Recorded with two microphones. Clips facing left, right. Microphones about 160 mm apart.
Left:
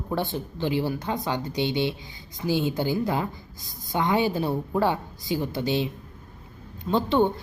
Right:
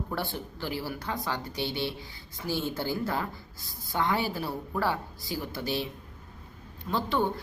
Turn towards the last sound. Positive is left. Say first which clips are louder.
# left 6 dB
turn(degrees=25)  # may be behind; listen again after turning